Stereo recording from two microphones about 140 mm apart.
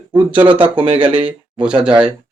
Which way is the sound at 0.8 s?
45° right (ahead or behind).